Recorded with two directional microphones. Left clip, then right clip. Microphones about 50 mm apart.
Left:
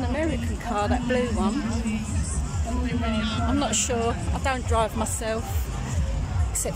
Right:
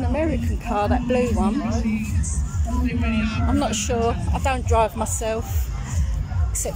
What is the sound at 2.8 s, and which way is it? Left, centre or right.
Speech, right.